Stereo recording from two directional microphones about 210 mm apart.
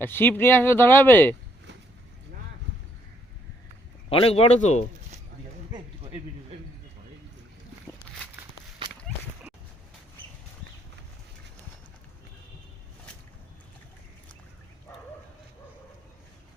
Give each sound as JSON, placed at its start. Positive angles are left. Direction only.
{"t": 0.0, "sound": "speech", "side_deg": 10}
{"t": 4.1, "sound": "speech", "side_deg": 25}
{"t": 5.7, "sound": "a sound", "side_deg": -30}